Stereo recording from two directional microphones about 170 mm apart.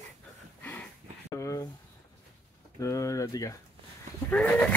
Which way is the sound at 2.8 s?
20° left (ahead or behind).